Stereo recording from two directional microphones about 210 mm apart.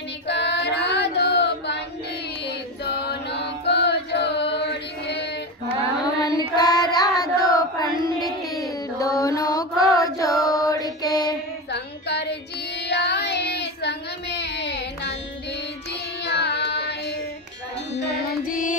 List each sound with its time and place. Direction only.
0.3 s child singing: 50° left (ahead or behind)
2.4 s chant: 50° left (ahead or behind)
6.0 s carnatic music: 20° left (ahead or behind)
6.5 s child singing: 20° left (ahead or behind)
8.9 s mantra: 15° left (ahead or behind)
9.9 s child singing: 15° left (ahead or behind)
10.7 s mantra: 20° left (ahead or behind)
11.7 s child singing: 55° left (ahead or behind)
16.3 s carnatic music: 50° left (ahead or behind)
17.9 s music: 55° left (ahead or behind)